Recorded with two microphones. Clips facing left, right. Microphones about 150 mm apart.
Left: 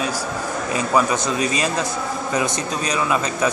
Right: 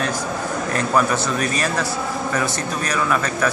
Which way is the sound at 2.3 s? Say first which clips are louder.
Left 3 dB; 20° left (ahead or behind).